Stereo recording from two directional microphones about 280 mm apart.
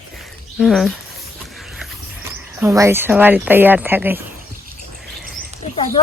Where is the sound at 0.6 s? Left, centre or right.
Centre.